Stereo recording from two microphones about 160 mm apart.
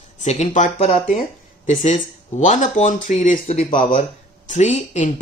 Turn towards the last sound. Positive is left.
turn(degrees=45)  # may be behind; listen again after turning